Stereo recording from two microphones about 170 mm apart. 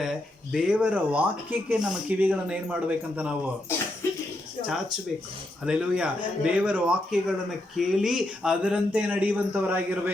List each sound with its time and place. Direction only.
0.0 s speech: 5° right (ahead or behind)
4.0 s a sound: 15° left (ahead or behind)
4.6 s speech: centre (ahead or behind)